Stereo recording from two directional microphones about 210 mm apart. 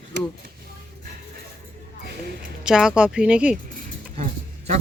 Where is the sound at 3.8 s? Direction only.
35° right (ahead or behind).